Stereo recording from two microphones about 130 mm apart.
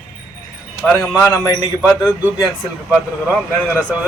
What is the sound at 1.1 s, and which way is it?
Speech, 15° left (ahead or behind).